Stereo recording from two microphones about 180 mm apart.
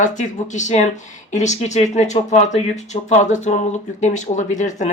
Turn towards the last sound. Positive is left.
turn(degrees=45)  # may be behind; listen again after turning